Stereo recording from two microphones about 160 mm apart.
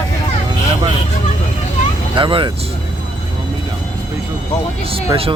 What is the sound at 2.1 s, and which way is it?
Speech, 30° right (ahead or behind).